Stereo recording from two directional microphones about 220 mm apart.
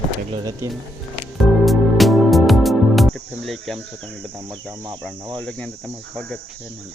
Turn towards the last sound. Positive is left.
turn(degrees=5)  # may be behind; listen again after turning